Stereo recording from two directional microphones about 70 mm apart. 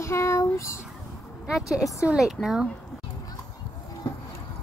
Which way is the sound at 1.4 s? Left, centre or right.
Centre.